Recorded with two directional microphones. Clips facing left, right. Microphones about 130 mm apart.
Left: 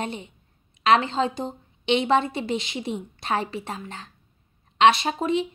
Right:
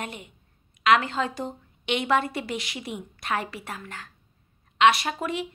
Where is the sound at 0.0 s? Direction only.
25° left (ahead or behind).